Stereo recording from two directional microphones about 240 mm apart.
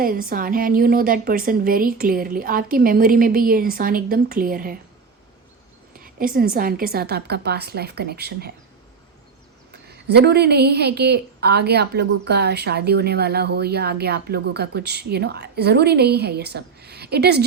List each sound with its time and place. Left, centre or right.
0.0 s a woman's voice: right
6.0 s a woman's voice: right
10.1 s a woman's voice: right